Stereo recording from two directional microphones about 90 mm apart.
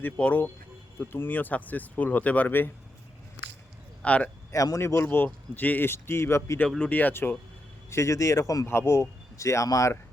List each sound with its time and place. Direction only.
0.0 s speech: 15° left (ahead or behind)
4.0 s speech: 15° left (ahead or behind)
4.5 s speech: 40° left (ahead or behind)
6.7 s speech: 10° left (ahead or behind); by 10.0 s 35° left (ahead or behind)